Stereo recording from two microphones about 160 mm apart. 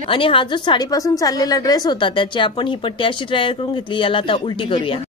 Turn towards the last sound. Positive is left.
turn(degrees=30)  # may be behind; listen again after turning